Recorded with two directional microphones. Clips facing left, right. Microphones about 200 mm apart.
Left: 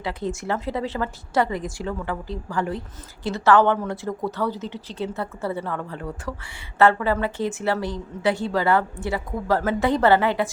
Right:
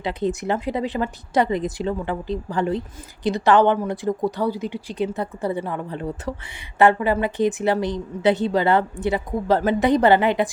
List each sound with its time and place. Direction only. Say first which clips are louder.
0.0 s a woman's voice: right 4 dB; 20° right (ahead or behind)